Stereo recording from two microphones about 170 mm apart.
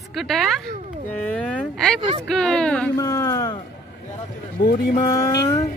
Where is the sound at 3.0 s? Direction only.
20° left (ahead or behind).